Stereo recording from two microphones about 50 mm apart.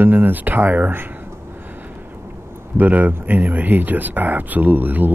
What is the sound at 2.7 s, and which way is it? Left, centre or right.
Speech, right.